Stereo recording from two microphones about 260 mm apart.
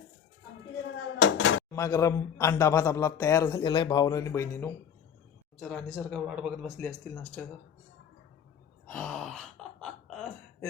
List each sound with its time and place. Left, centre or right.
1.2 s dishes: left
1.7 s a man's voice: centre
8.9 s gasp: centre